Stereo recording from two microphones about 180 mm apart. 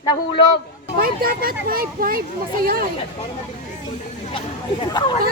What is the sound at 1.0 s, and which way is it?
A child's voice, 55° right (ahead or behind).